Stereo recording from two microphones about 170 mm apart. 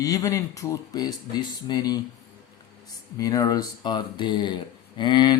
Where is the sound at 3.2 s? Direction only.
20° left (ahead or behind).